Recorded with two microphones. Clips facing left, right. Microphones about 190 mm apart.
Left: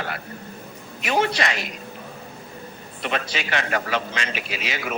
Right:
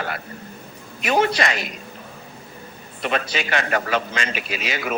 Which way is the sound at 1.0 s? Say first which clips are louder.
Right 3 dB; 45° right (ahead or behind).